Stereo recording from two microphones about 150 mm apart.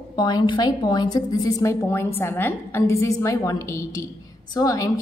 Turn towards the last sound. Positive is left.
turn(degrees=25)  # may be behind; listen again after turning